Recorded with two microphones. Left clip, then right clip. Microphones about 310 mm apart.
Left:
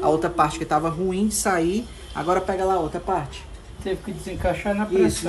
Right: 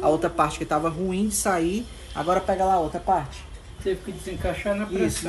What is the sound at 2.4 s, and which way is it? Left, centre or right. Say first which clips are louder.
Speech: right 1 dB; right.